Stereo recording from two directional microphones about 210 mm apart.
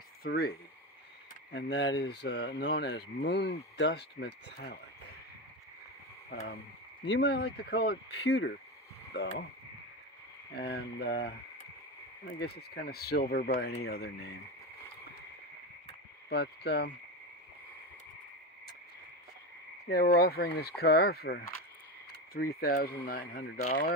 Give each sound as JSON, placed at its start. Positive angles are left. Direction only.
{"t": 0.2, "sound": "speech", "side_deg": 50}
{"t": 1.5, "sound": "speech", "side_deg": 55}
{"t": 6.3, "sound": "speech", "side_deg": 50}
{"t": 10.6, "sound": "speech", "side_deg": 50}
{"t": 12.4, "sound": "speech", "side_deg": 50}
{"t": 16.3, "sound": "speech", "side_deg": 50}
{"t": 19.9, "sound": "speech", "side_deg": 50}